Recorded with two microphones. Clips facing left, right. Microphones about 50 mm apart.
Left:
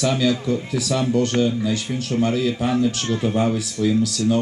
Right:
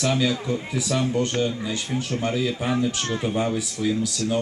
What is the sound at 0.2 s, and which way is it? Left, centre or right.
A man's voice, centre.